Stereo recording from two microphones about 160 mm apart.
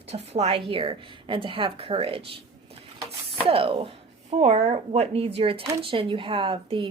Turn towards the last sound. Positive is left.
turn(degrees=-30)  # may be behind; listen again after turning